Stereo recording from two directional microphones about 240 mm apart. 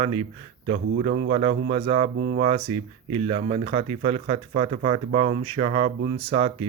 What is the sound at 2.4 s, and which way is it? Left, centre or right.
Speech, right.